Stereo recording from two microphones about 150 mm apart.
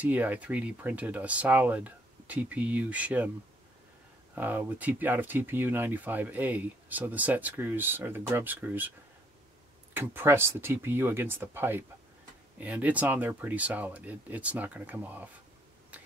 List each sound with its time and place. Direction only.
0.0 s speech: 10° right (ahead or behind)
4.4 s speech: 10° right (ahead or behind)
9.9 s speech: 15° right (ahead or behind)
15.9 s a sound: 10° right (ahead or behind)